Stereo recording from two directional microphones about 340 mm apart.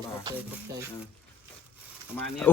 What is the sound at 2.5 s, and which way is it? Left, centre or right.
Speech, centre.